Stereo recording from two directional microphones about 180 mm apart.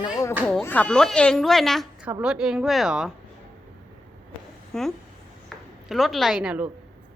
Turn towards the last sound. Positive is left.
turn(degrees=-5)  # may be behind; listen again after turning